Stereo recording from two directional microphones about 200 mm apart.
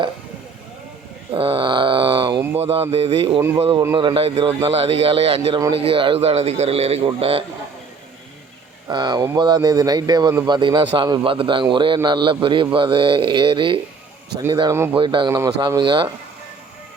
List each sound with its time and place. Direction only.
1.3 s a sound: 25° right (ahead or behind)
2.6 s speech: 30° right (ahead or behind)
8.9 s speech: 20° right (ahead or behind)